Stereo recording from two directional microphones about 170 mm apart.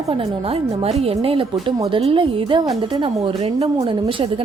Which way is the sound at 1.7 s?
20° right (ahead or behind).